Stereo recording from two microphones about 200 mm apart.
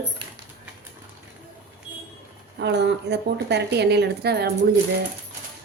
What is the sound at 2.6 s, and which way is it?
A woman's voice, 60° right (ahead or behind).